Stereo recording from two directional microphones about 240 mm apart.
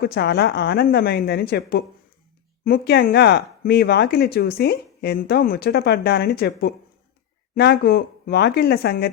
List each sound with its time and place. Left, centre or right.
0.0 s speech: left